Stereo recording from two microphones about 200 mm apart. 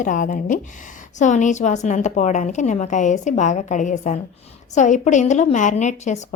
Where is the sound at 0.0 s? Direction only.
40° left (ahead or behind).